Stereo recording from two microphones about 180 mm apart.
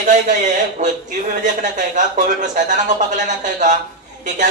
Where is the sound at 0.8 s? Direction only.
45° right (ahead or behind).